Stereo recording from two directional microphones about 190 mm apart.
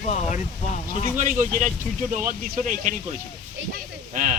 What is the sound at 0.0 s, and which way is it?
Speech, 40° left (ahead or behind).